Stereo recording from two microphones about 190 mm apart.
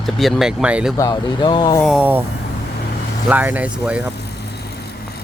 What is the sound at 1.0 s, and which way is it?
Speech, 20° left (ahead or behind).